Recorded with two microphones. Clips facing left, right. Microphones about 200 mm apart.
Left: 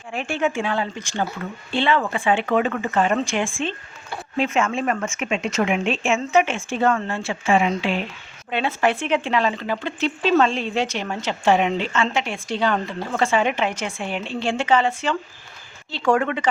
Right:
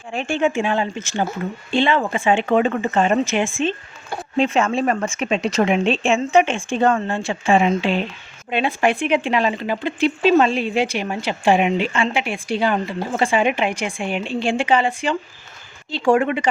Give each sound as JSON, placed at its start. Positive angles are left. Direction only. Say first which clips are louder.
{"t": 0.1, "sound": "speech", "louder": "right 3 dB", "side_deg": -25}
{"t": 4.4, "sound": "speech", "louder": "right 3 dB", "side_deg": -30}
{"t": 8.4, "sound": "speech", "louder": "right 2 dB", "side_deg": -15}